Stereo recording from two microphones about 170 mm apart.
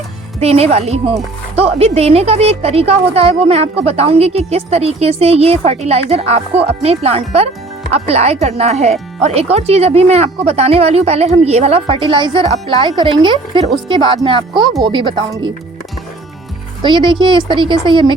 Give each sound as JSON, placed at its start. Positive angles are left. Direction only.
{"t": 0.3, "sound": "speech", "side_deg": -35}
{"t": 16.8, "sound": "speech", "side_deg": -25}